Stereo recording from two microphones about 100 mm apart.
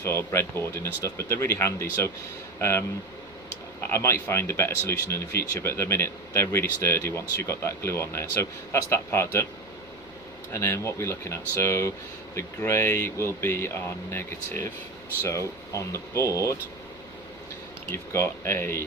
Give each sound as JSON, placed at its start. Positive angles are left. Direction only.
{"t": 0.0, "sound": "speech", "side_deg": 25}
{"t": 3.8, "sound": "speech", "side_deg": 25}
{"t": 10.5, "sound": "speech", "side_deg": 25}
{"t": 17.9, "sound": "speech", "side_deg": 25}